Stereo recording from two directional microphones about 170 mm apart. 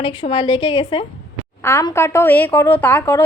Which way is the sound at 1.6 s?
15° left (ahead or behind).